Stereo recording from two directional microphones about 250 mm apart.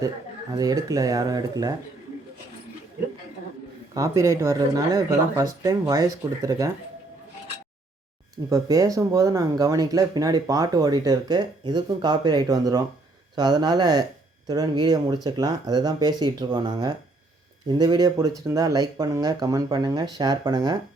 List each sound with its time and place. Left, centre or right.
0.5 s speech: centre
3.9 s speech: centre
8.4 s speech: centre